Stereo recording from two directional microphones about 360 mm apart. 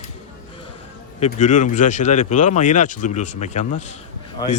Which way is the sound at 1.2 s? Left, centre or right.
Centre.